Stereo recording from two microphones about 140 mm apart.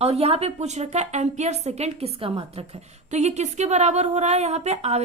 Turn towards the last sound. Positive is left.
turn(degrees=-50)  # may be behind; listen again after turning